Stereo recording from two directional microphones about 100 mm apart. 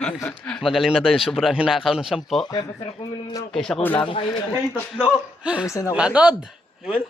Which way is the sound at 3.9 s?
60° left (ahead or behind).